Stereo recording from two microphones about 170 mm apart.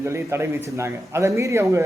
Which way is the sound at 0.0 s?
15° right (ahead or behind).